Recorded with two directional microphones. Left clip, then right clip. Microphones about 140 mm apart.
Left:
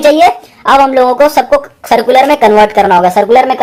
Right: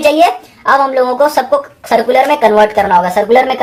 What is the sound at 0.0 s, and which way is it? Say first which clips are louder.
A woman's voice: left 3 dB; 45° left (ahead or behind).